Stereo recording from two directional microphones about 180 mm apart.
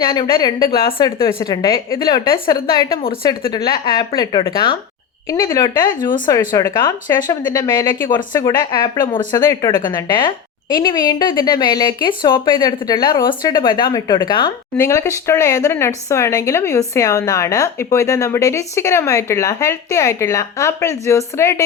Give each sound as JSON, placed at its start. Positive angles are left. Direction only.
{"t": 0.0, "sound": "speech", "side_deg": 20}
{"t": 14.8, "sound": "speech", "side_deg": 15}